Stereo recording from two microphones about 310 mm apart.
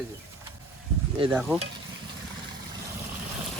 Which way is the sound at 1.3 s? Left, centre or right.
Centre.